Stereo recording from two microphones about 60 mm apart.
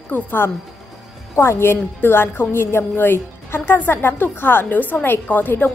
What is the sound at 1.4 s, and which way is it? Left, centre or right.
A woman's voice, left.